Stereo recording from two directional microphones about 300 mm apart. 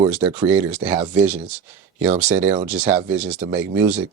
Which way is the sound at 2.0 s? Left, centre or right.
Centre.